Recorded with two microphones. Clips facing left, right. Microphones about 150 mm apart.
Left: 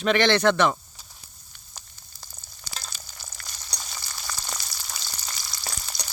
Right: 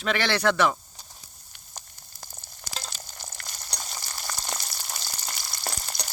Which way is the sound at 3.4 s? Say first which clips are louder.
Right 1 dB; 55° right (ahead or behind).